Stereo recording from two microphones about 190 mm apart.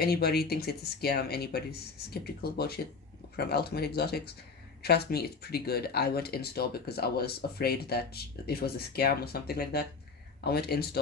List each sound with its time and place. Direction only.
0.0 s speech: 55° left (ahead or behind)